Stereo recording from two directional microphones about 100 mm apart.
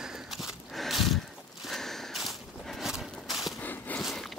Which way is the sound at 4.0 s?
Centre (ahead or behind).